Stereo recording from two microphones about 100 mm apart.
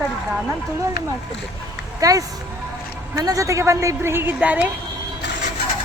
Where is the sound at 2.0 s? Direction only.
35° right (ahead or behind); by 4.7 s 15° right (ahead or behind).